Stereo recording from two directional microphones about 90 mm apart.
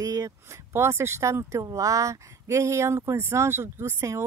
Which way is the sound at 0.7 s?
30° right (ahead or behind).